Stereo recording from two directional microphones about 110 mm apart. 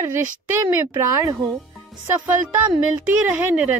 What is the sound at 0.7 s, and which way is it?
Speech, 20° right (ahead or behind).